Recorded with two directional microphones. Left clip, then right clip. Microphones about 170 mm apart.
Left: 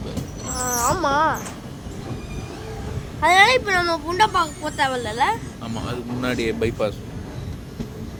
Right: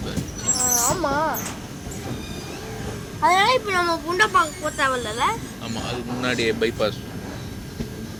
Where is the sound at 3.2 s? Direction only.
40° left (ahead or behind).